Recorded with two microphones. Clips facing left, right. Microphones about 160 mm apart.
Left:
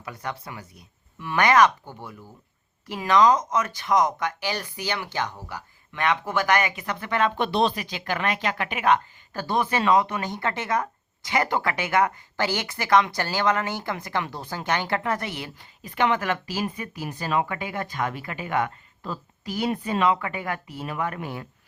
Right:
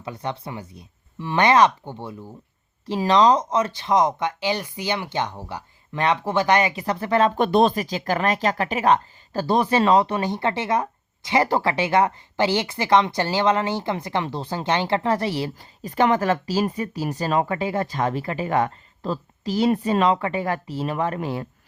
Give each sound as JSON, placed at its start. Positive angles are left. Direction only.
{"t": 0.0, "sound": "speech", "side_deg": -25}